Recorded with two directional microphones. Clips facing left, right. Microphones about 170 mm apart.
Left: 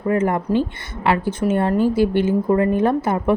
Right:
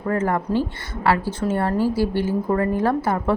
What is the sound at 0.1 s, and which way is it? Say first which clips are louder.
A woman's voice: left 3 dB; 20° left (ahead or behind).